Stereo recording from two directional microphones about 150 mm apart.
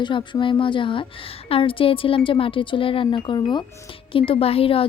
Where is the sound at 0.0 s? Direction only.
30° left (ahead or behind).